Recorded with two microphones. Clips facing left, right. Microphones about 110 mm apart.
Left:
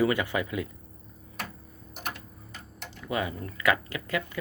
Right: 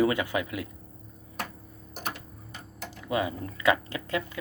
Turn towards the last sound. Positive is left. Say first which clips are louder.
# even
turn(degrees=-25)  # may be behind; listen again after turning